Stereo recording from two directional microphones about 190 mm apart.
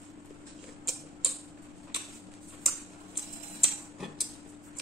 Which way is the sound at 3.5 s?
Centre (ahead or behind).